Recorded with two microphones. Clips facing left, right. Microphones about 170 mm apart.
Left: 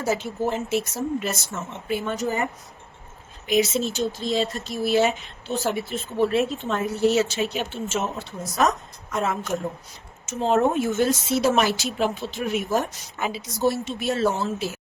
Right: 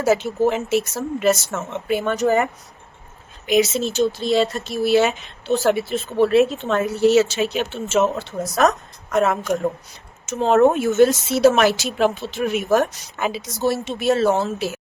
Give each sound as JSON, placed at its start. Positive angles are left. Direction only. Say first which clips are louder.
{"t": 0.0, "sound": "speech", "louder": "right 7 dB", "side_deg": -80}
{"t": 10.2, "sound": "speech", "louder": "right 6 dB", "side_deg": -75}